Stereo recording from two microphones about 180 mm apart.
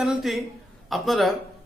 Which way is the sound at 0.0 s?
Centre (ahead or behind).